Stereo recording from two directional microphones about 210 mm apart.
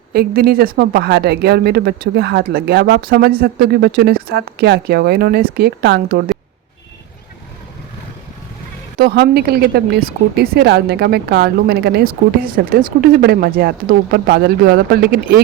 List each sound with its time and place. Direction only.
0.1 s speech: 45° right (ahead or behind)
9.0 s speech: 50° right (ahead or behind)